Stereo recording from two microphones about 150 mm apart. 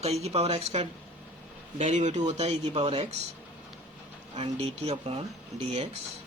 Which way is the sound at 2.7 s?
35° right (ahead or behind).